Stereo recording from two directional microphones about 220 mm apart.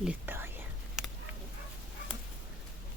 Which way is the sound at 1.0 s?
Centre (ahead or behind).